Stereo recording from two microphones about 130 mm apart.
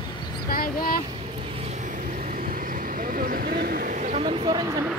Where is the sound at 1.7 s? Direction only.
75° right (ahead or behind).